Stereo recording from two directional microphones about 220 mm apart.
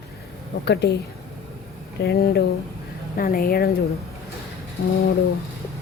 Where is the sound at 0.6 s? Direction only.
50° left (ahead or behind).